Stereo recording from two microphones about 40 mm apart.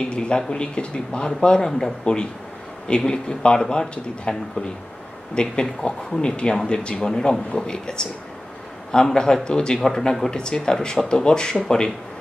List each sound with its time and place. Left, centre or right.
0.1 s speech: left